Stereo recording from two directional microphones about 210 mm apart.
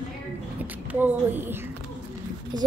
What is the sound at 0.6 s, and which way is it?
A child's voice, 10° right (ahead or behind).